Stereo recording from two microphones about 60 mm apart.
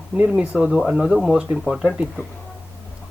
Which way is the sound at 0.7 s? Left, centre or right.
Centre.